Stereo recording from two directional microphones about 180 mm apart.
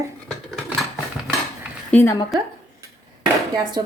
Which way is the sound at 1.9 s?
15° left (ahead or behind).